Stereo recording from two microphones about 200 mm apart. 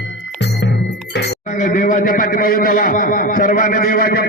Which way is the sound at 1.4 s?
40° left (ahead or behind).